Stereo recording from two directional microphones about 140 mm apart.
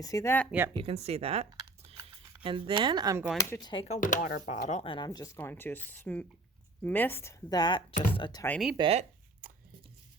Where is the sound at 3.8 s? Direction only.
60° left (ahead or behind).